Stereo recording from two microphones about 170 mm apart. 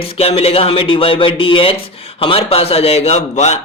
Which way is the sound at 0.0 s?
35° left (ahead or behind).